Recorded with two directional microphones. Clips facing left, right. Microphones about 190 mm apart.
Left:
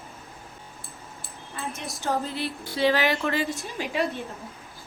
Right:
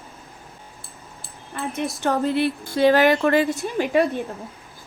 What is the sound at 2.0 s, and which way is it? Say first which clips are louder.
A woman's voice: right 7 dB; 65° right (ahead or behind).